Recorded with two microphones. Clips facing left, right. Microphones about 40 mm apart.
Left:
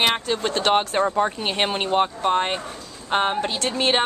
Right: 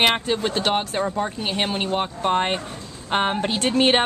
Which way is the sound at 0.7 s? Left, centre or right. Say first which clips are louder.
Left 3 dB; centre.